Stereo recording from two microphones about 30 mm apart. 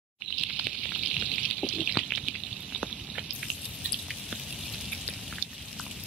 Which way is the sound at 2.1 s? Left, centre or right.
Centre.